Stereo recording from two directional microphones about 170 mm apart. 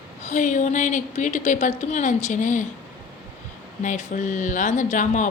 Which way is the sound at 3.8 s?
50° left (ahead or behind).